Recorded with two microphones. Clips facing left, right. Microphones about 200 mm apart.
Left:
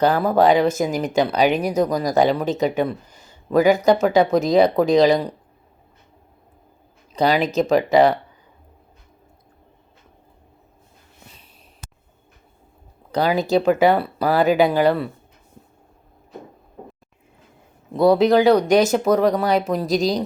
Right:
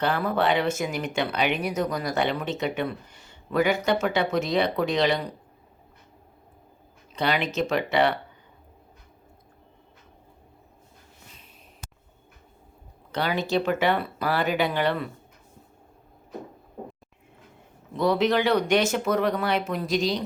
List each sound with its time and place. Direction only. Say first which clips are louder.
0.0 s speech: left 8 dB; 40° left (ahead or behind)
7.1 s speech: left 7 dB; 35° left (ahead or behind)
13.1 s speech: left 7 dB; 35° left (ahead or behind)
17.9 s speech: left 8 dB; 35° left (ahead or behind)